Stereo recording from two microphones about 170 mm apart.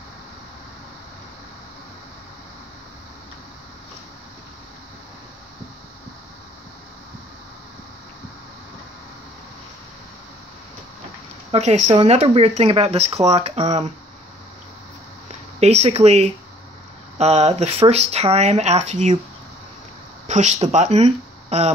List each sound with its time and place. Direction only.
11.5 s speech: 40° right (ahead or behind)
15.6 s speech: 40° right (ahead or behind)
20.2 s speech: 40° right (ahead or behind)